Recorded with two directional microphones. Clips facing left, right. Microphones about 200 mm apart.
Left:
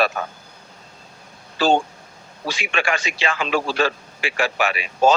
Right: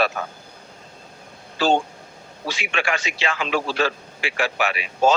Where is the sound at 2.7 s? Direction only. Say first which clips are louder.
Left 2 dB; 45° left (ahead or behind).